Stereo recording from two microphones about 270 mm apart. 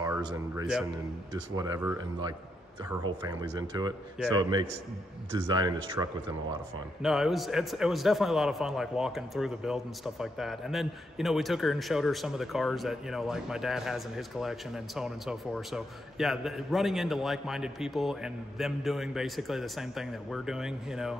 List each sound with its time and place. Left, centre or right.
0.0 s speech: centre
7.0 s a man's voice: centre